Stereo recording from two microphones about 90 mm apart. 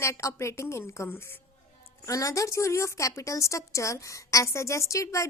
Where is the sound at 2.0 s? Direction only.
35° left (ahead or behind).